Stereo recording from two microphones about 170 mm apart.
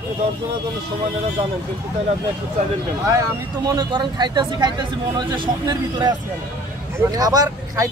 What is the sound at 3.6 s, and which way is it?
A man's voice, 25° right (ahead or behind).